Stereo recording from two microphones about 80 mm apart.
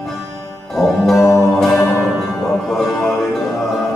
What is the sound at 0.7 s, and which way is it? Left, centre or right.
Music, centre.